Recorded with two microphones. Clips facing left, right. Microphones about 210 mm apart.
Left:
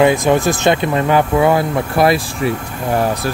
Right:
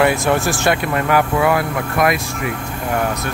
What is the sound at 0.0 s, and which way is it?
Speech, 15° left (ahead or behind).